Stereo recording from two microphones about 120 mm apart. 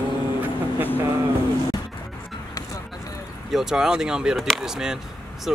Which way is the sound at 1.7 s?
35° left (ahead or behind).